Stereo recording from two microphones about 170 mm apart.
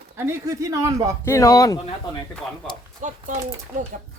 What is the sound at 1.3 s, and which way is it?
Speech, 20° left (ahead or behind).